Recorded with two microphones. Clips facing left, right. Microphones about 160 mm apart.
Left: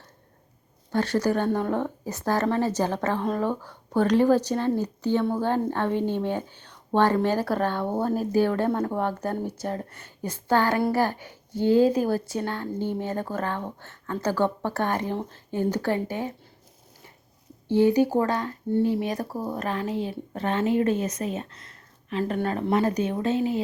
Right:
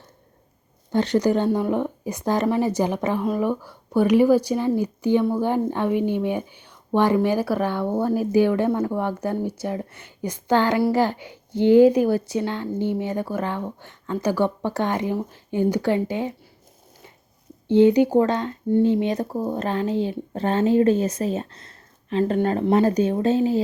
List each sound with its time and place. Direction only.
0.9 s a woman's voice: 20° right (ahead or behind)
17.7 s speech: 20° right (ahead or behind)